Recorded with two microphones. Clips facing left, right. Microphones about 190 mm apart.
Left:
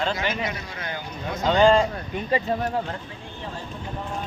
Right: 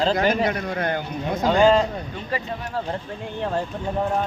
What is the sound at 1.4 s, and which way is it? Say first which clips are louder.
Speech: right 1 dB; 5° right (ahead or behind).